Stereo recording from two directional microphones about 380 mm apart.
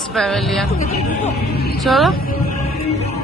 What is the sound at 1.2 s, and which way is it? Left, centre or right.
Speech, left.